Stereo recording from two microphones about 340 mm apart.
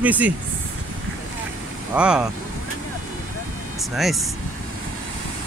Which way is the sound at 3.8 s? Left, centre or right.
Centre.